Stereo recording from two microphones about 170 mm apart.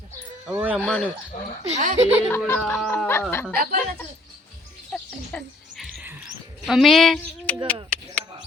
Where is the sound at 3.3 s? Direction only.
15° left (ahead or behind).